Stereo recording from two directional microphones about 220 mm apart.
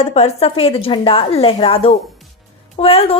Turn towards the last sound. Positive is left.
turn(degrees=25)  # may be behind; listen again after turning